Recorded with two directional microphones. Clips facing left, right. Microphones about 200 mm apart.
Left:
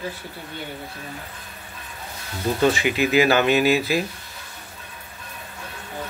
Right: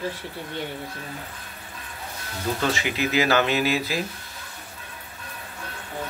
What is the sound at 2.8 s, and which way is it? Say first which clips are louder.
A man's voice: left 5 dB; 15° left (ahead or behind).